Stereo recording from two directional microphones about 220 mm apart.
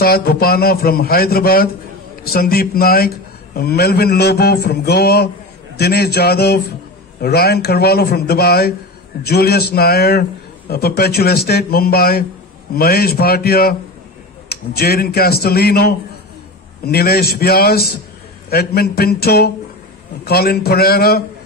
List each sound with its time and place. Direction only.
0.0 s a man's voice: 45° left (ahead or behind)